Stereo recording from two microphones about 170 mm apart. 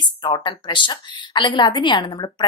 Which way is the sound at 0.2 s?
30° left (ahead or behind).